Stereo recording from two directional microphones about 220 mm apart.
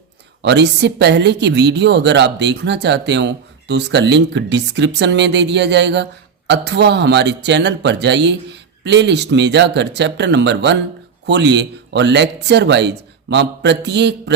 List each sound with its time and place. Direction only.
0.4 s a woman's voice: 50° right (ahead or behind)